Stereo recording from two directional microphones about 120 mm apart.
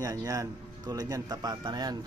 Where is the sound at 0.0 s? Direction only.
30° right (ahead or behind).